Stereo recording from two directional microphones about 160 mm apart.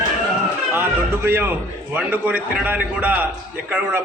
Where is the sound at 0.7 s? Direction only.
15° right (ahead or behind).